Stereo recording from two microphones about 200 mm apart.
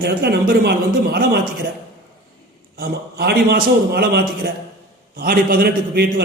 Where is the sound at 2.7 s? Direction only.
50° right (ahead or behind).